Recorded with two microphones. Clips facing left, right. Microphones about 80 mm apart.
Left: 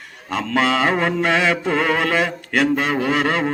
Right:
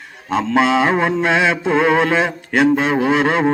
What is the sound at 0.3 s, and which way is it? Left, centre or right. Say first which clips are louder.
Mantra: right 4 dB; centre.